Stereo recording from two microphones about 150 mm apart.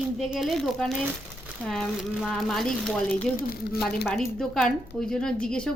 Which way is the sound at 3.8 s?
Centre (ahead or behind).